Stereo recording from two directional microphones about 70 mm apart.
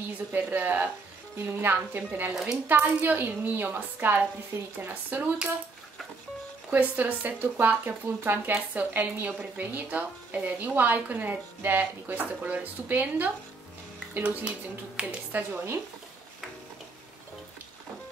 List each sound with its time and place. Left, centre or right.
0.3 s speech: right
6.7 s speech: right